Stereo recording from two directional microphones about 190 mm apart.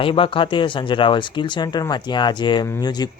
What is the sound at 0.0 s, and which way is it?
Speech, 30° left (ahead or behind).